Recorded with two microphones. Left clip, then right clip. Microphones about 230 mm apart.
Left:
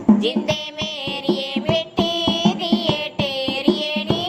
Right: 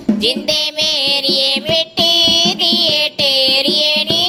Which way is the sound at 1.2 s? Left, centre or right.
Right.